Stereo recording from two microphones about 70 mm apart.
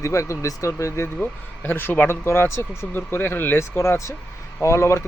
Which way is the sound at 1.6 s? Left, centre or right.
Left.